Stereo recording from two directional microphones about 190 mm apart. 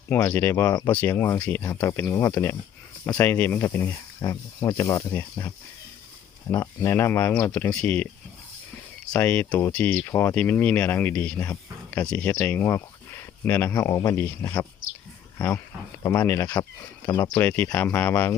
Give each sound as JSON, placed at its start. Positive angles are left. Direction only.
{"t": 0.1, "sound": "speech", "side_deg": 10}
{"t": 6.5, "sound": "speech", "side_deg": 15}
{"t": 9.1, "sound": "speech", "side_deg": 10}
{"t": 17.1, "sound": "speech", "side_deg": 20}
{"t": 17.4, "sound": "speech", "side_deg": 10}